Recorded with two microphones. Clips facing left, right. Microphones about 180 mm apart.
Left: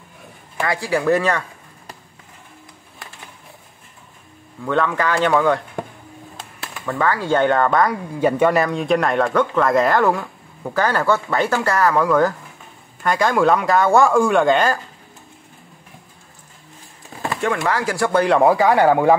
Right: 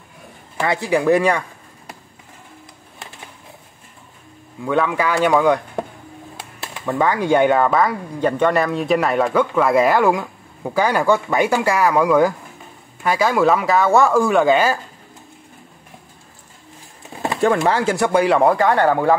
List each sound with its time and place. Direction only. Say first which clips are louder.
0.7 s speech: right 2 dB; 20° right (ahead or behind)
4.6 s speech: right 1 dB; 10° right (ahead or behind)
6.7 s speech: right 2 dB; 20° right (ahead or behind)
17.4 s speech: right 5 dB; 30° right (ahead or behind)
18.2 s speech: left 2 dB; centre (ahead or behind)